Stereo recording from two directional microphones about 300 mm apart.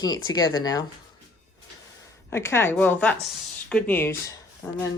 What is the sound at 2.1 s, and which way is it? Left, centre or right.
A woman's voice, centre.